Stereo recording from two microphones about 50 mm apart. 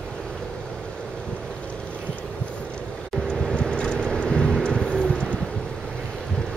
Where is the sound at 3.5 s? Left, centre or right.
Centre.